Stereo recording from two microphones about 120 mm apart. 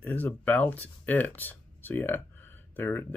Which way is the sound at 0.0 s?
15° left (ahead or behind).